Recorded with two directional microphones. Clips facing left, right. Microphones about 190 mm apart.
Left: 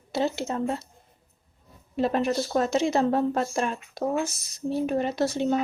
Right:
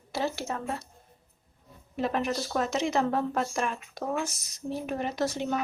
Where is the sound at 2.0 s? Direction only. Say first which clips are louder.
Left 5 dB; 30° left (ahead or behind).